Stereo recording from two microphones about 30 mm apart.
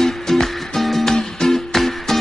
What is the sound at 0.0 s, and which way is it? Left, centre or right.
Music, centre.